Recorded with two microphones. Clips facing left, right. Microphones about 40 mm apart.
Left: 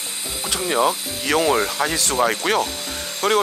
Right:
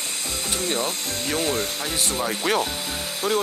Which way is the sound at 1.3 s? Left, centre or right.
Left.